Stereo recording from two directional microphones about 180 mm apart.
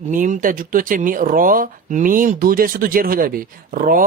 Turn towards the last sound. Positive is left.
turn(degrees=-50)  # may be behind; listen again after turning